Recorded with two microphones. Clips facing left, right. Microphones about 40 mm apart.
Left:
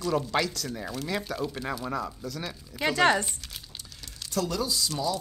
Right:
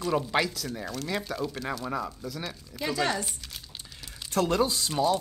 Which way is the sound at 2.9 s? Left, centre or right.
Left.